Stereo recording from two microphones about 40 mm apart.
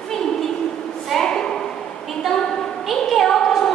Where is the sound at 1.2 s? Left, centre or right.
Centre.